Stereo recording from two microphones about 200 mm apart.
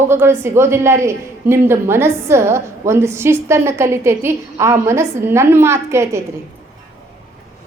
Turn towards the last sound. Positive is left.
turn(degrees=-15)  # may be behind; listen again after turning